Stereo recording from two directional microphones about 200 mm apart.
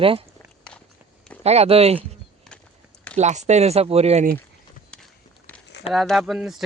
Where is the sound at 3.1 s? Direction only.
35° right (ahead or behind).